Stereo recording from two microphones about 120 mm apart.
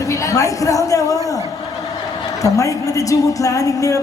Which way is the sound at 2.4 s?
30° left (ahead or behind).